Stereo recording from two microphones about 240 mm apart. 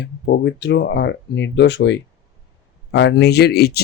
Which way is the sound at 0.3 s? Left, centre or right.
Left.